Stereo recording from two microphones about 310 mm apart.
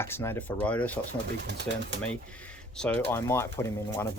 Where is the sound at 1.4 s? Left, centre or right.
Right.